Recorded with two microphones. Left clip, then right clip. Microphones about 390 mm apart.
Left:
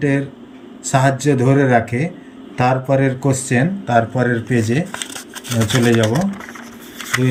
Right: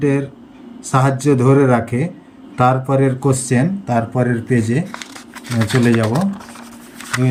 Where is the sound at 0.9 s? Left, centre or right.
Centre.